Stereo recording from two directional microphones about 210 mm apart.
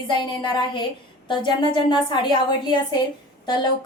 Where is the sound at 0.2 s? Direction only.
25° left (ahead or behind).